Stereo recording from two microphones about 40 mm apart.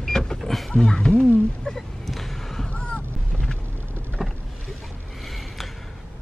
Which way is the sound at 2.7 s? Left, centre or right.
Left.